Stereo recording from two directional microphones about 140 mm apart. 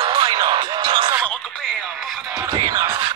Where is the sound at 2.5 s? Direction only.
30° right (ahead or behind).